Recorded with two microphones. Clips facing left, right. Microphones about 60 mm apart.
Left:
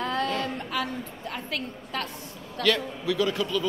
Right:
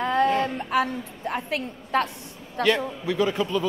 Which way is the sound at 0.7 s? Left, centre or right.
Right.